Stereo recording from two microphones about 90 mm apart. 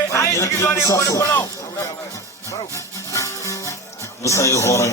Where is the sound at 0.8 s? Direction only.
35° left (ahead or behind).